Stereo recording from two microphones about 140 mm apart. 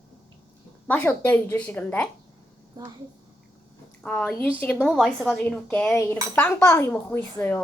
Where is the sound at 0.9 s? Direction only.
10° left (ahead or behind).